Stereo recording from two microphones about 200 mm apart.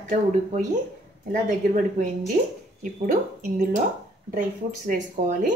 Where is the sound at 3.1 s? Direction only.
40° right (ahead or behind).